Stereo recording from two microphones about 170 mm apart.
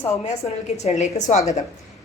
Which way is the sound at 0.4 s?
40° left (ahead or behind).